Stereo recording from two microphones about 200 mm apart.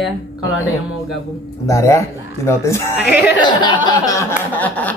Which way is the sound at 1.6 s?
15° left (ahead or behind).